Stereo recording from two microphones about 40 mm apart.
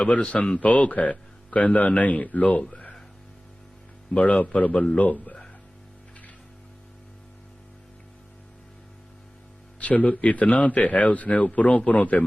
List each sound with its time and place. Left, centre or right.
0.0 s speech: left
4.1 s speech: left
9.8 s speech: left